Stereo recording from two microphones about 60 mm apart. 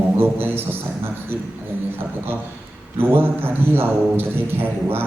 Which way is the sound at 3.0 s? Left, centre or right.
Right.